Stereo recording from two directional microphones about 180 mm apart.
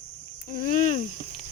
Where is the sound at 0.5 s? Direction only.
45° left (ahead or behind).